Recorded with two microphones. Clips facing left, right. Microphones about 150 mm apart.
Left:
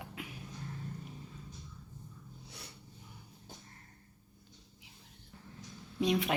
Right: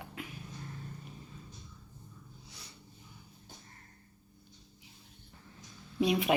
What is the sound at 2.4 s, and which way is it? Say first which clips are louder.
Sniff: left 3 dB; 60° left (ahead or behind).